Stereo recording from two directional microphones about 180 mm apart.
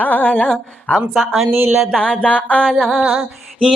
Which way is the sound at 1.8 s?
5° left (ahead or behind).